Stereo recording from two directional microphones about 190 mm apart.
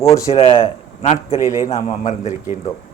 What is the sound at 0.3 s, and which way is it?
A man's voice, 30° left (ahead or behind).